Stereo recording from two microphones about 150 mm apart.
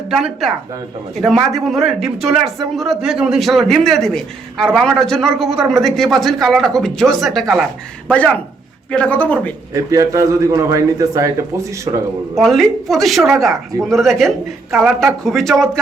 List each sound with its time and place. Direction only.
0.1 s a man's voice: centre (ahead or behind)
9.7 s a man's voice: 20° right (ahead or behind)
12.3 s a man's voice: centre (ahead or behind)